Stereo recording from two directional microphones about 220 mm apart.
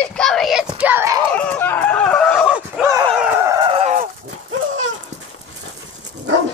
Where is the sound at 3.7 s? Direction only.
35° right (ahead or behind).